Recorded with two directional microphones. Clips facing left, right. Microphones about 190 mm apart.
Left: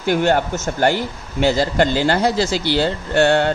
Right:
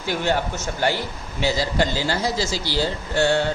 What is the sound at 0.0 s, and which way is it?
A man's voice, 55° left (ahead or behind).